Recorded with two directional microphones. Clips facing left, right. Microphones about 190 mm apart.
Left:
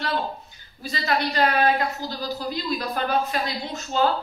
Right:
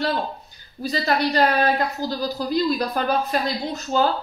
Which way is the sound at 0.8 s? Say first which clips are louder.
Right 4 dB; 40° right (ahead or behind).